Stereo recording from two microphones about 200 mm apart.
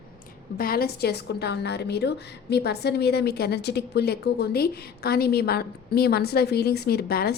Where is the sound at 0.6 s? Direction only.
50° left (ahead or behind).